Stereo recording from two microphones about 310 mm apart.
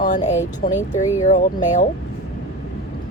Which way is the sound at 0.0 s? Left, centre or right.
Left.